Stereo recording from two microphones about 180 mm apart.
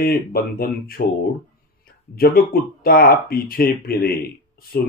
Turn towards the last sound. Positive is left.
turn(degrees=55)  # may be behind; listen again after turning